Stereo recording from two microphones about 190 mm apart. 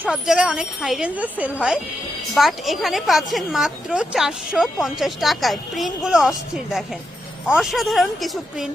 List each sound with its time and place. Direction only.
0.0 s speech: 5° right (ahead or behind)